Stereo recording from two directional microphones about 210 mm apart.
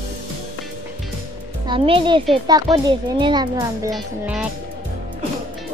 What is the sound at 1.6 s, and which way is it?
A child's voice, 25° right (ahead or behind).